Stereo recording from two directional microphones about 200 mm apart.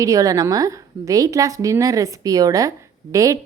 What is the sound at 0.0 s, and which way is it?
A woman's voice, 15° right (ahead or behind).